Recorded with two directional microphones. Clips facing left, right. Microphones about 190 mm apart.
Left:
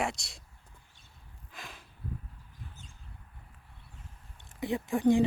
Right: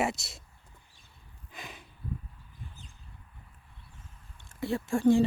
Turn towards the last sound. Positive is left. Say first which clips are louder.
# right 2 dB
turn(degrees=15)  # may be behind; listen again after turning